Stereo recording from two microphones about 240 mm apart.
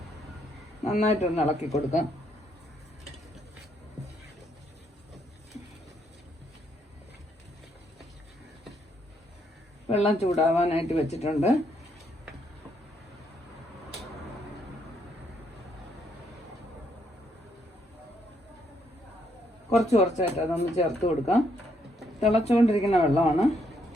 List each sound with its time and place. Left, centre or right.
0.9 s speech: left
9.9 s speech: left
19.7 s speech: left